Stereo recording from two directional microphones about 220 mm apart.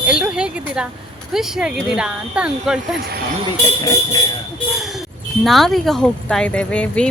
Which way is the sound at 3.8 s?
20° left (ahead or behind).